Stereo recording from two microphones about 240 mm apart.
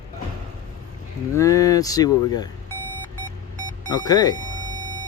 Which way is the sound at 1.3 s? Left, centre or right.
Centre.